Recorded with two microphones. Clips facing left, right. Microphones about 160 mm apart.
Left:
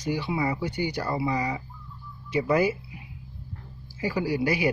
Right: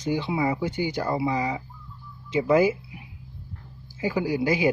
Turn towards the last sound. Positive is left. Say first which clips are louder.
# right 2 dB
turn(degrees=-20)  # may be behind; listen again after turning